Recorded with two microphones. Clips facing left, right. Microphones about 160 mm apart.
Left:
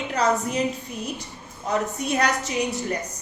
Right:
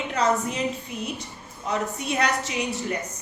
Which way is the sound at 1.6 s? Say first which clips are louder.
Left 2 dB; 40° left (ahead or behind).